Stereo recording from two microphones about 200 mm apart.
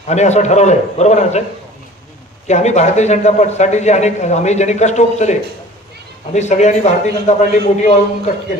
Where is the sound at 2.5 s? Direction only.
35° left (ahead or behind).